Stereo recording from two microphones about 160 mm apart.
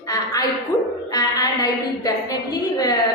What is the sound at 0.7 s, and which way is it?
A woman's voice, 20° left (ahead or behind).